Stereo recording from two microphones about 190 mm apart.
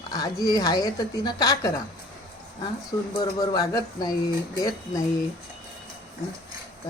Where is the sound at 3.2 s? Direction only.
20° left (ahead or behind).